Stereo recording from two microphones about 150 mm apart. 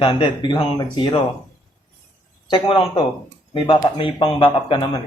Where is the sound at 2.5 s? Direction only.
35° left (ahead or behind).